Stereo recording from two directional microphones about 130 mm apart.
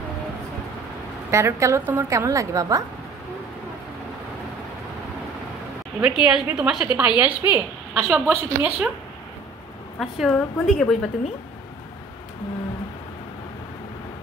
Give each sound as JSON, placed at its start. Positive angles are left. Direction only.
{"t": 1.3, "sound": "a woman's voice", "side_deg": -20}
{"t": 6.0, "sound": "a woman's voice", "side_deg": -5}
{"t": 9.9, "sound": "a woman's voice", "side_deg": 0}